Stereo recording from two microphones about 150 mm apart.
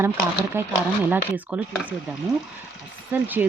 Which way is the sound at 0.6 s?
15° right (ahead or behind).